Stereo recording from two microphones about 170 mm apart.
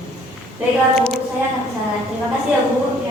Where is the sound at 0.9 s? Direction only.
Centre (ahead or behind).